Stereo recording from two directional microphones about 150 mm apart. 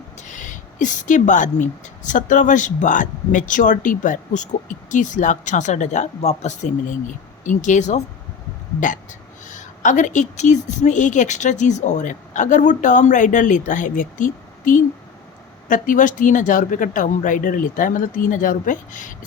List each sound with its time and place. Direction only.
0.2 s speech: 55° left (ahead or behind)
9.5 s speech: 55° left (ahead or behind)